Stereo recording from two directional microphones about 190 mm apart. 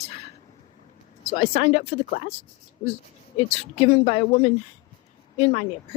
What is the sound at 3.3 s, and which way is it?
Speech, 35° left (ahead or behind).